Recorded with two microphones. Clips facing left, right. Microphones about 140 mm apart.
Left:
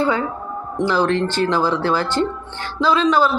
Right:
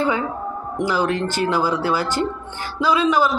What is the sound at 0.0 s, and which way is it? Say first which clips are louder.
Speech: left 1 dB; 15° right (ahead or behind).